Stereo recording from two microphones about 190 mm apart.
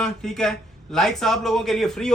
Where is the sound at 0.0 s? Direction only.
5° left (ahead or behind).